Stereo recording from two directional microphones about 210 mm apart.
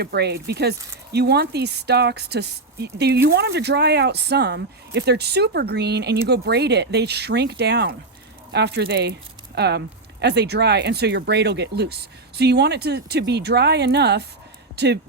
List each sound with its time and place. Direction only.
0.0 s speech: 50° right (ahead or behind)